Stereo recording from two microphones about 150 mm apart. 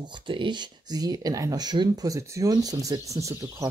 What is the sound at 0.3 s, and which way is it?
Speech, 30° right (ahead or behind).